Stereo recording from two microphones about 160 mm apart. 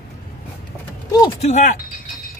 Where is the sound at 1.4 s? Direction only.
45° left (ahead or behind).